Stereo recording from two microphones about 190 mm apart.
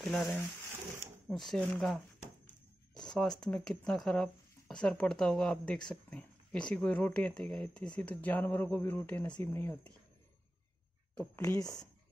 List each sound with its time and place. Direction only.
0.0 s speech: centre (ahead or behind)
3.1 s speech: 5° left (ahead or behind)
11.1 s speech: 15° left (ahead or behind)